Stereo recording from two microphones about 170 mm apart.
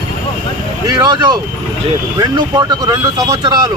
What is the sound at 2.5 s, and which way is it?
Speech, 25° right (ahead or behind).